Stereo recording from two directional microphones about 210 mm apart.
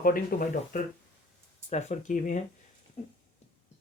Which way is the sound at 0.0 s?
40° left (ahead or behind).